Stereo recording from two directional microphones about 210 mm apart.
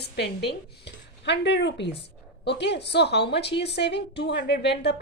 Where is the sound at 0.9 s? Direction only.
55° left (ahead or behind).